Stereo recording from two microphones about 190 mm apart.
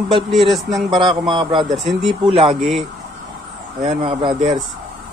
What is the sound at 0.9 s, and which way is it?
Speech, 25° right (ahead or behind).